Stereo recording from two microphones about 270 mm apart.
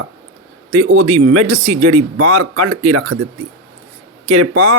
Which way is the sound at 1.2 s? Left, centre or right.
Right.